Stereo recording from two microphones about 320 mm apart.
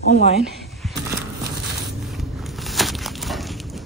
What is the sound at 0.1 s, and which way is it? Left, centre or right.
Speech, centre.